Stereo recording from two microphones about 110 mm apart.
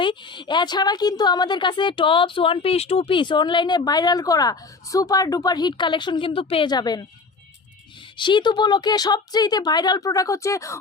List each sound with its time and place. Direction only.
0.0 s a woman's voice: 45° left (ahead or behind)
6.7 s speech: 40° left (ahead or behind)
8.2 s speech: 45° left (ahead or behind); by 10.8 s 30° left (ahead or behind)